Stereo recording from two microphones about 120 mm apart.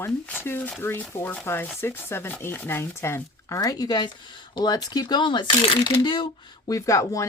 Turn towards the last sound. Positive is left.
turn(degrees=25)  # may be behind; listen again after turning